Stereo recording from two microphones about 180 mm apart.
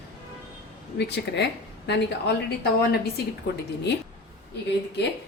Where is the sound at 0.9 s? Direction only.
70° left (ahead or behind).